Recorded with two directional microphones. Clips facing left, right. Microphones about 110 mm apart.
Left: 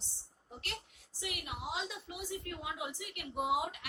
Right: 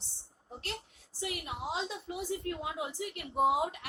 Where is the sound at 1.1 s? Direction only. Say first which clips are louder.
Right 4 dB; 35° right (ahead or behind).